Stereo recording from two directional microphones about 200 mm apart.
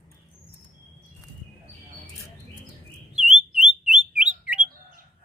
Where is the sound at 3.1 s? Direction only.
5° right (ahead or behind).